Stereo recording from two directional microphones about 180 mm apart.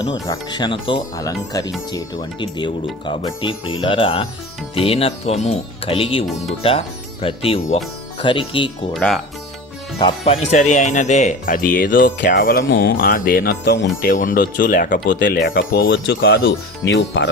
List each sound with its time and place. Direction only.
0.3 s speech: 25° left (ahead or behind)
8.9 s speech: centre (ahead or behind)
10.0 s speech: 30° left (ahead or behind); by 13.8 s 65° left (ahead or behind)
14.0 s speech: 50° left (ahead or behind)
15.9 s speech: 75° left (ahead or behind)